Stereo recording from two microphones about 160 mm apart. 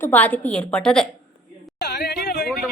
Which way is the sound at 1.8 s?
90° left.